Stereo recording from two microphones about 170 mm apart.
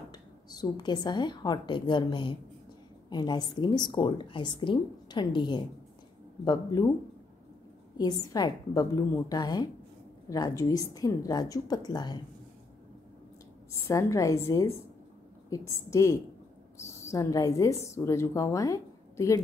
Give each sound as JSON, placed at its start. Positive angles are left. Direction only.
{"t": 0.1, "sound": "a woman's voice", "side_deg": 25}
{"t": 8.0, "sound": "a woman's voice", "side_deg": 20}
{"t": 13.8, "sound": "a woman's voice", "side_deg": 15}